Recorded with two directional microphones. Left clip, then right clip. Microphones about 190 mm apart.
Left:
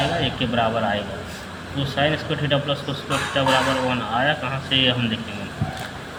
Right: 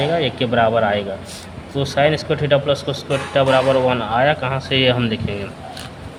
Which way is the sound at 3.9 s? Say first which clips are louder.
Right 5 dB; 65° right (ahead or behind).